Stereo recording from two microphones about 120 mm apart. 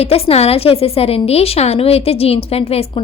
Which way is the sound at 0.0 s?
55° left (ahead or behind).